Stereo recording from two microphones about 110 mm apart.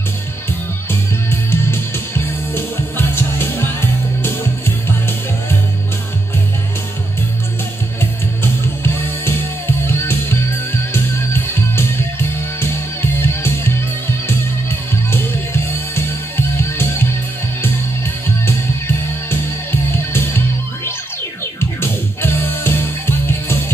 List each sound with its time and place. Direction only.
1.3 s music: 20° left (ahead or behind)
8.0 s music: 20° left (ahead or behind)
13.2 s music: 20° left (ahead or behind)
15.0 s music: 20° left (ahead or behind)
19.7 s music: 20° left (ahead or behind)